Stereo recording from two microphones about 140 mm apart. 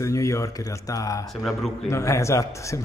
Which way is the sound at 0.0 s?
20° left (ahead or behind).